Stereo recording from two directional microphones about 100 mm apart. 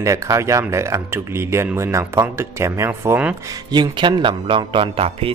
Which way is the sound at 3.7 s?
50° right (ahead or behind).